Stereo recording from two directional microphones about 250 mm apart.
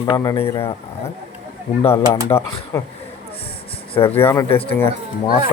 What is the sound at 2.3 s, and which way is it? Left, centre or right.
Speech, centre.